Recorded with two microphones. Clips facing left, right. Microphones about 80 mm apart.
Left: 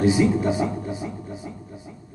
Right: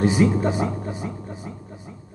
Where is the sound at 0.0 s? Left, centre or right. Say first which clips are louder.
Even; right.